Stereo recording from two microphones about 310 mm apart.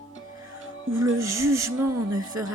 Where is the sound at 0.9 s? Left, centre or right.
Centre.